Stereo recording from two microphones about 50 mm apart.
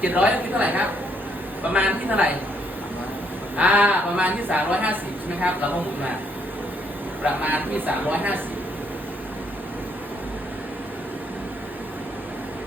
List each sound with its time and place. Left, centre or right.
0.0 s speech: right
3.6 s speech: right
7.3 s speech: right